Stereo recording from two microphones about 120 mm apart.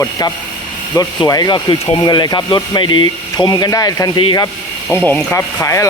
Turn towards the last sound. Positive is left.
turn(degrees=25)  # may be behind; listen again after turning